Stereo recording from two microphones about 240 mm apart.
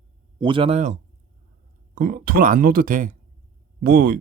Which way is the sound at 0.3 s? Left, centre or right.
Right.